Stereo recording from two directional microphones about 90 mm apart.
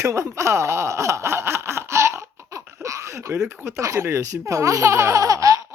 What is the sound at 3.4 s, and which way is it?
Speech, 35° right (ahead or behind).